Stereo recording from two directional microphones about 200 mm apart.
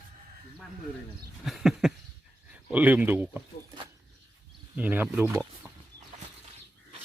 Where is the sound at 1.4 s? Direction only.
Centre (ahead or behind).